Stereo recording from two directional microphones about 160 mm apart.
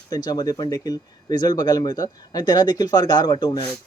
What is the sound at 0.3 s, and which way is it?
Speech, 25° left (ahead or behind).